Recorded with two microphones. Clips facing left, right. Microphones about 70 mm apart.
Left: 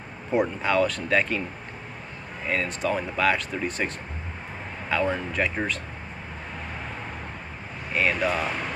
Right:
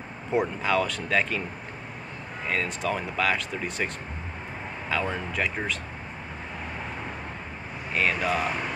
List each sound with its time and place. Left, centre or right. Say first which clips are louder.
0.3 s speech: left 1 dB; centre
2.4 s speech: left 2 dB; centre
7.9 s speech: left 1 dB; centre